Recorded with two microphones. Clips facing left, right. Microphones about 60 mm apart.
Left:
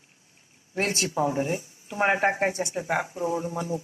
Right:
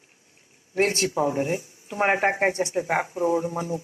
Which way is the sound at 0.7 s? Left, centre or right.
Right.